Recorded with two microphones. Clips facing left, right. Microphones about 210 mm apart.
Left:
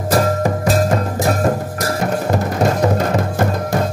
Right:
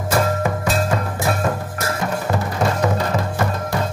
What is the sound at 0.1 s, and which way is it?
Music, 35° left (ahead or behind).